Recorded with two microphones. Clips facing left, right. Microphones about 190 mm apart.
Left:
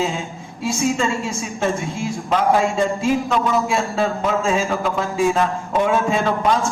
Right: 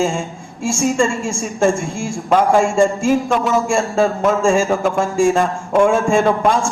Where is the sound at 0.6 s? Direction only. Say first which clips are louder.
Right 3 dB; 45° right (ahead or behind).